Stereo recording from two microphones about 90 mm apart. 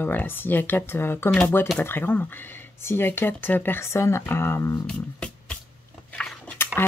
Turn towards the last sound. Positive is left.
turn(degrees=10)  # may be behind; listen again after turning